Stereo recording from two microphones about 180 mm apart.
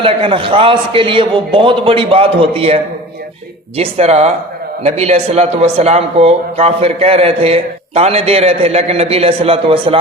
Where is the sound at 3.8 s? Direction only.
35° right (ahead or behind).